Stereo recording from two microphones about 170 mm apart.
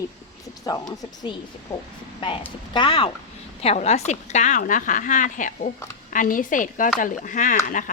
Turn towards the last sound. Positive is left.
turn(degrees=50)  # may be behind; listen again after turning